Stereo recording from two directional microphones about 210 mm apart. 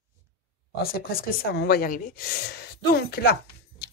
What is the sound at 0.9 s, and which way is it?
Speech, 45° left (ahead or behind).